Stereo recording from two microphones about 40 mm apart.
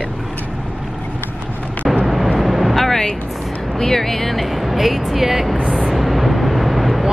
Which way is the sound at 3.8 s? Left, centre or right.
Centre.